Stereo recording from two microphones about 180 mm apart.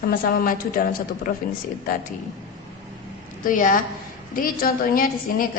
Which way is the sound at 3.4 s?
50° left (ahead or behind).